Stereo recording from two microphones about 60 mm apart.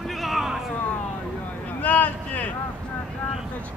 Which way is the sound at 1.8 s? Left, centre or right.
Left.